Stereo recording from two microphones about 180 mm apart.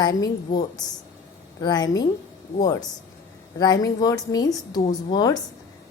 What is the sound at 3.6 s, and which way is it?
A woman's voice, 20° left (ahead or behind).